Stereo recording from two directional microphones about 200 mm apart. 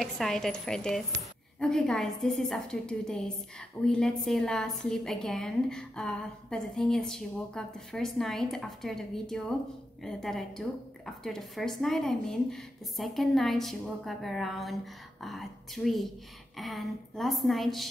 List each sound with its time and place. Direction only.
0.0 s a woman's voice: centre (ahead or behind)